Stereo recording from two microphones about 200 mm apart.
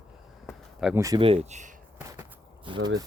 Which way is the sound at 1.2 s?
30° right (ahead or behind).